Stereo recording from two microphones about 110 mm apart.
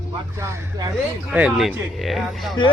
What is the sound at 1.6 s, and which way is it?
Speech, centre (ahead or behind).